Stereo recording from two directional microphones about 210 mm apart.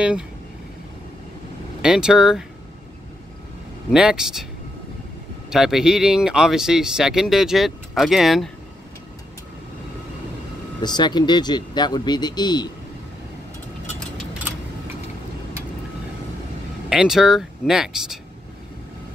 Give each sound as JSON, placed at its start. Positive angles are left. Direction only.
{"t": 1.8, "sound": "speech", "side_deg": -5}
{"t": 3.9, "sound": "speech", "side_deg": -5}
{"t": 5.5, "sound": "speech", "side_deg": 0}
{"t": 10.8, "sound": "speech", "side_deg": 20}
{"t": 16.9, "sound": "speech", "side_deg": 0}